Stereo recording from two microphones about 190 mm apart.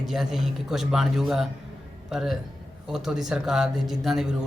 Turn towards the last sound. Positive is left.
turn(degrees=0)  # may be behind; listen again after turning